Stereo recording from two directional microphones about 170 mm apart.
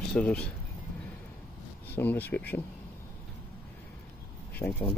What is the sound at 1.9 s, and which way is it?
Speech, 10° left (ahead or behind).